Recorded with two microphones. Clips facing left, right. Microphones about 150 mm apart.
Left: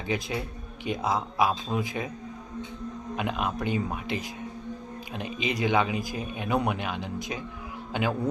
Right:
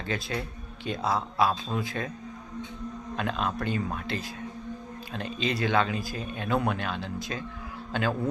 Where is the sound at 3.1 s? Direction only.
15° left (ahead or behind).